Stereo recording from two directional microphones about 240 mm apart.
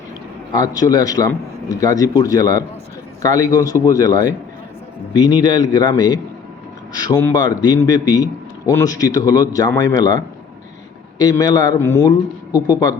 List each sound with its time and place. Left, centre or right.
0.5 s a man's voice: centre
11.2 s a man's voice: centre
12.5 s speech: centre